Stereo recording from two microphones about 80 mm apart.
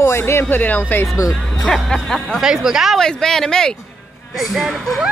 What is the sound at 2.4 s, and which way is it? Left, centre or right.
Speech, centre.